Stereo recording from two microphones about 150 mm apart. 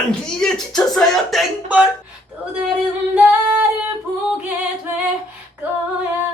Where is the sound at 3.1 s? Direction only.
10° right (ahead or behind).